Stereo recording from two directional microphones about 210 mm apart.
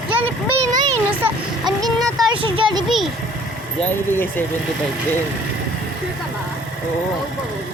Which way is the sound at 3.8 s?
10° left (ahead or behind).